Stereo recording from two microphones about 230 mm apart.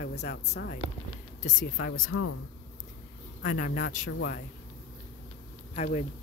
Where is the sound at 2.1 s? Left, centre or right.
Left.